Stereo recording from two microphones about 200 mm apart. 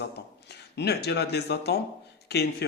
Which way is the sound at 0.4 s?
55° left (ahead or behind).